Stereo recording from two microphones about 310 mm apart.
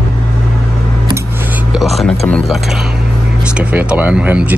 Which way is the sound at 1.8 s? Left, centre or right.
Centre.